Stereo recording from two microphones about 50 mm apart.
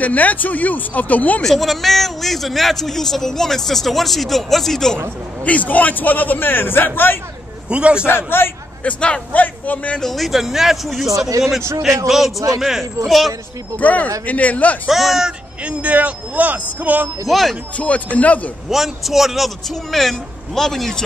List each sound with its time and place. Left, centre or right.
0.0 s a man's voice: left
1.4 s a man's voice: centre
5.4 s a man's voice: left
7.7 s a man's voice: right
8.8 s speech: left
9.3 s a man's voice: left
9.9 s a man's voice: centre
12.1 s a man's voice: centre
13.7 s a man's voice: left
14.9 s a man's voice: centre
15.6 s speech: right
17.3 s a man's voice: centre
17.7 s speech: left
18.7 s a man's voice: centre